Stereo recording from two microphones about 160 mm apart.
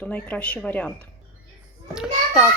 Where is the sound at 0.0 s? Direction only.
10° left (ahead or behind).